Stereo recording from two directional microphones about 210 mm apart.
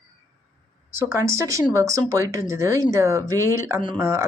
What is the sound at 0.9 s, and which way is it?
Speech, 10° right (ahead or behind).